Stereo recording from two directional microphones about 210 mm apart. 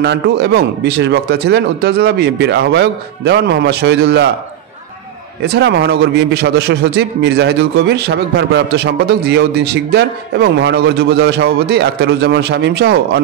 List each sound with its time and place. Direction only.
0.0 s a man's voice: 55° right (ahead or behind)
5.4 s a man's voice: 50° right (ahead or behind)